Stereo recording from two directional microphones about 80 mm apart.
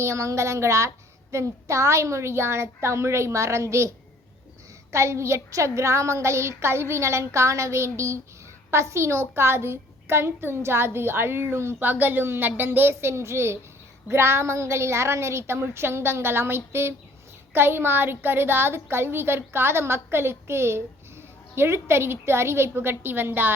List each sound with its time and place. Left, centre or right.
0.0 s a child's voice: right